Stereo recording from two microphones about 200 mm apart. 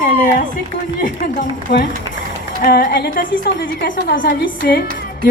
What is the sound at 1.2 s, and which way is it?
A woman's voice, 40° left (ahead or behind).